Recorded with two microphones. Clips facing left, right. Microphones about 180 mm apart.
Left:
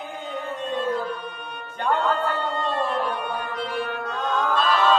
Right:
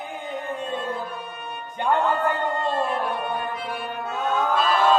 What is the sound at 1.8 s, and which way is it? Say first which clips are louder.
Music: right 1 dB; 15° right (ahead or behind).